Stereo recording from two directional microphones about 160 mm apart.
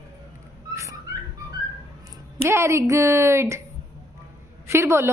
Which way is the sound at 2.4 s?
15° right (ahead or behind).